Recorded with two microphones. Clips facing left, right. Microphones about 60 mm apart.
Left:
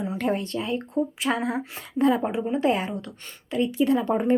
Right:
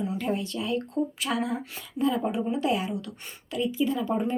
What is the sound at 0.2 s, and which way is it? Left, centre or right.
Speech, left.